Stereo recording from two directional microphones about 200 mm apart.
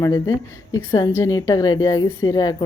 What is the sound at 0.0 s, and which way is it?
Speech, 15° left (ahead or behind).